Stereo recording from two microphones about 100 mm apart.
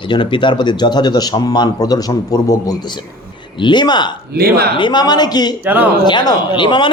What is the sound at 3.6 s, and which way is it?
A man's voice, 50° left (ahead or behind).